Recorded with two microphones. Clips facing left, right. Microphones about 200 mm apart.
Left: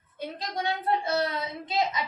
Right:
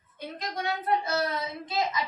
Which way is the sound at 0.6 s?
30° left (ahead or behind).